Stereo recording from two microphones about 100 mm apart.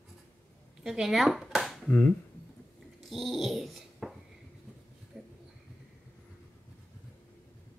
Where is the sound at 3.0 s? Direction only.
Centre (ahead or behind).